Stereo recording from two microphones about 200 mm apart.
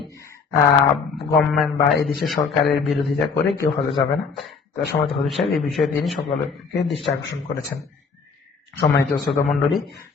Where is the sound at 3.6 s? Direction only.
25° left (ahead or behind).